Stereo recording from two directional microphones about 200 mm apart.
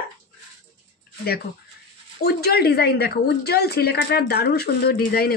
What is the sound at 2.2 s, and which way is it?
A woman's voice, 50° left (ahead or behind).